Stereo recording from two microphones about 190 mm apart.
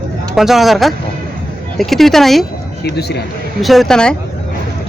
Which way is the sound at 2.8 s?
60° left (ahead or behind).